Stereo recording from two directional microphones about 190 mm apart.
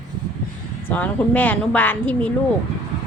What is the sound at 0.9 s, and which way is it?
Speech, 10° left (ahead or behind).